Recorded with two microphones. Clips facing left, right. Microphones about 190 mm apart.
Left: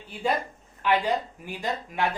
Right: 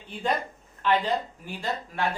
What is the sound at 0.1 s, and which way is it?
A man's voice, 5° left (ahead or behind).